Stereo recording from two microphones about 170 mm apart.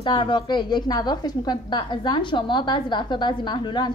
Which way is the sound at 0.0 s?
30° left (ahead or behind).